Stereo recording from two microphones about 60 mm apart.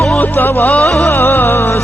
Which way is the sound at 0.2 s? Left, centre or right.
Left.